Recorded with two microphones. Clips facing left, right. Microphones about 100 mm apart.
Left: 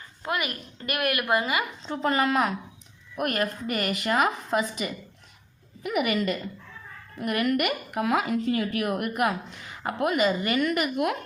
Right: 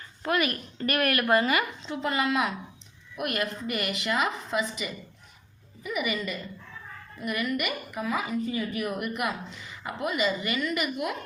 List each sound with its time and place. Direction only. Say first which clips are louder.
0.3 s a woman's voice: right 3 dB; 20° left (ahead or behind)
1.8 s a woman's voice: left 3 dB; 40° left (ahead or behind); by 11.2 s 55° left (ahead or behind)